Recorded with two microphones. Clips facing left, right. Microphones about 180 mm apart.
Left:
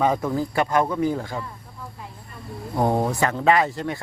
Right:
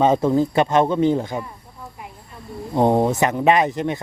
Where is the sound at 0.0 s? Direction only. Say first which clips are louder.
Right 6 dB; 25° right (ahead or behind).